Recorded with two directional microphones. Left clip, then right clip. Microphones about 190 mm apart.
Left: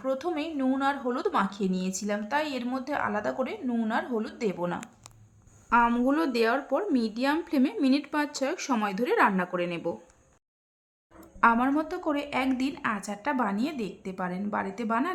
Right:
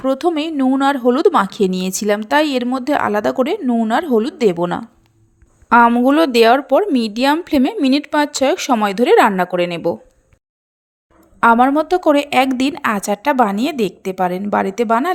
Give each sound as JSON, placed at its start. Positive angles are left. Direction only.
{"t": 0.0, "sound": "speech", "side_deg": -40}
{"t": 5.6, "sound": "a woman's voice", "side_deg": -45}
{"t": 11.3, "sound": "a woman's voice", "side_deg": -45}